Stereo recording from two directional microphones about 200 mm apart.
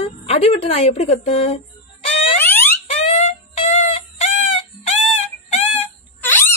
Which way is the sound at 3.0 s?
30° left (ahead or behind).